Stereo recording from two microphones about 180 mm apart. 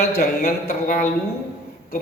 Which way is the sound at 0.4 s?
45° left (ahead or behind).